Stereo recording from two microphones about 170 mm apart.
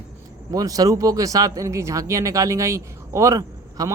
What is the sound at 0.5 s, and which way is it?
Speech, 20° right (ahead or behind).